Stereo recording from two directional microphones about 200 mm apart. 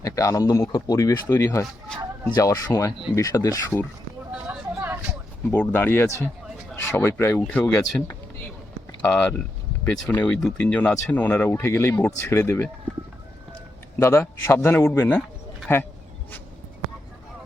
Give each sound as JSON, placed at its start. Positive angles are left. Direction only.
{"t": 0.0, "sound": "speech", "side_deg": 15}
{"t": 4.4, "sound": "a sound", "side_deg": -5}
{"t": 5.5, "sound": "speech", "side_deg": 10}
{"t": 14.0, "sound": "speech", "side_deg": 10}